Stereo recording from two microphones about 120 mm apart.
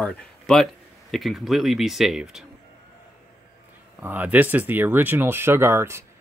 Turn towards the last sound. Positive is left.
turn(degrees=-20)  # may be behind; listen again after turning